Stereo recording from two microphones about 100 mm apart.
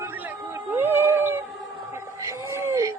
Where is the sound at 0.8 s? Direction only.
25° right (ahead or behind).